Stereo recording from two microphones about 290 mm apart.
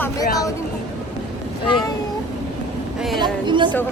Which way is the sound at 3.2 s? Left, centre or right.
Centre.